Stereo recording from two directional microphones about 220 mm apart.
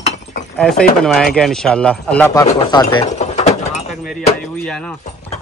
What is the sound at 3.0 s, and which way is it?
Mechanisms, 30° left (ahead or behind).